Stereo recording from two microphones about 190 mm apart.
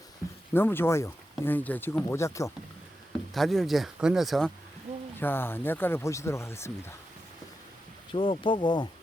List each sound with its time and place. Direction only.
0.5 s speech: 10° left (ahead or behind)
3.3 s speech: centre (ahead or behind)
5.2 s speech: 10° left (ahead or behind)
8.1 s speech: 25° left (ahead or behind)